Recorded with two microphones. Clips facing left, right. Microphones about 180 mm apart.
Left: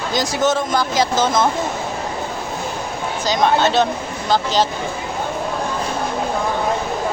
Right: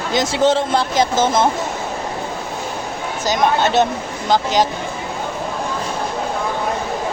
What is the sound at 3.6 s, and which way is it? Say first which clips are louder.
Speech: right 1 dB; 20° right (ahead or behind).